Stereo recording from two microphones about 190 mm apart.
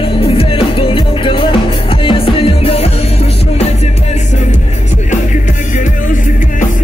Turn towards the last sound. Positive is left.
turn(degrees=40)  # may be behind; listen again after turning